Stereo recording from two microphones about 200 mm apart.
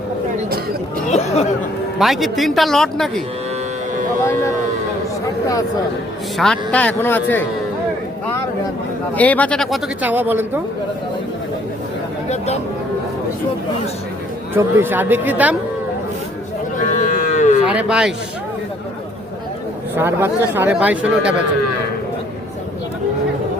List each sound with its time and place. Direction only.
2.0 s speech: centre (ahead or behind)
4.2 s speech: 15° left (ahead or behind)
6.3 s a man's voice: centre (ahead or behind)
9.1 s speech: 5° left (ahead or behind); by 10.6 s 10° right (ahead or behind)
14.5 s speech: 10° right (ahead or behind)
17.0 s livestock: 40° left (ahead or behind)
17.7 s speech: 5° right (ahead or behind)
20.0 s speech: 10° right (ahead or behind)